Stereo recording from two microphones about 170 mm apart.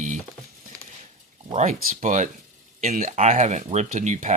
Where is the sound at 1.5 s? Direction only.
45° right (ahead or behind).